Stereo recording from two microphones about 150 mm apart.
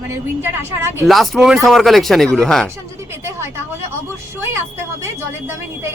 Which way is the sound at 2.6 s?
15° right (ahead or behind).